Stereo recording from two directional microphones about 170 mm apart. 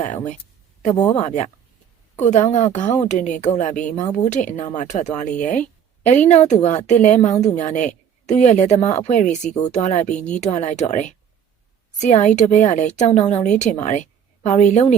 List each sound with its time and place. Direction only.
1.1 s a woman's voice: 40° left (ahead or behind)